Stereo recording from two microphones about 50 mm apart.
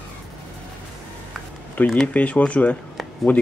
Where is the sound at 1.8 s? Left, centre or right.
Left.